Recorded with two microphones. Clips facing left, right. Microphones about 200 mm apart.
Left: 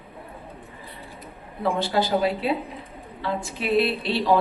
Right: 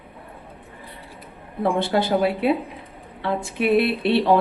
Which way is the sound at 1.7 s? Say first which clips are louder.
Right 2 dB; 55° right (ahead or behind).